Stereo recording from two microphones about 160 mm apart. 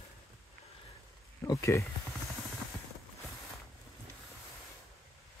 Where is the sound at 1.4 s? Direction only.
20° left (ahead or behind).